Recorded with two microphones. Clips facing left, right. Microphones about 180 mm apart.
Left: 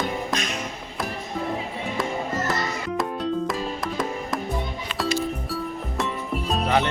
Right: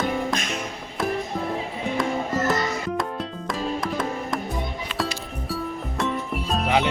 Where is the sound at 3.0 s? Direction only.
Centre (ahead or behind).